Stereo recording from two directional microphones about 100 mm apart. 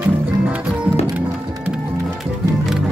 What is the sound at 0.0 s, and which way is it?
Music, 15° right (ahead or behind).